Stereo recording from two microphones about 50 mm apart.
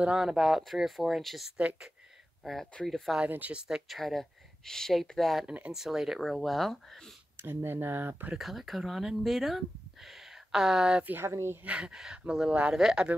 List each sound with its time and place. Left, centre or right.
0.0 s speech: centre
1.6 s speech: right
2.4 s speech: centre
3.3 s speech: right
3.5 s speech: centre
3.9 s speech: centre
7.3 s speech: right
8.4 s speech: centre
11.2 s a woman's voice: right
11.6 s speech: right
12.7 s speech: centre